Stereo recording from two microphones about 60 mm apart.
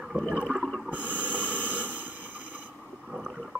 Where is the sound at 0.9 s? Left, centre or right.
Left.